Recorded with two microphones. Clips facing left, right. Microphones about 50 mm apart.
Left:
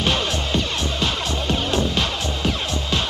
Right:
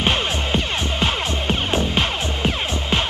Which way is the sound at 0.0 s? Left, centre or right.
Right.